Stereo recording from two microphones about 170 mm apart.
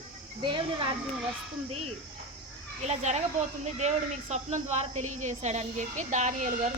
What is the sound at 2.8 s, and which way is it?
A woman's voice, 45° right (ahead or behind).